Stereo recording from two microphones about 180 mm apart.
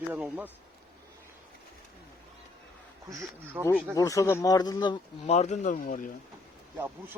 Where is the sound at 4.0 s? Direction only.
20° left (ahead or behind).